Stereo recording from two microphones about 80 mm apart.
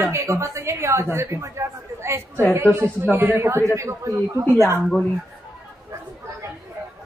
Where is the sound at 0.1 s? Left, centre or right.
Right.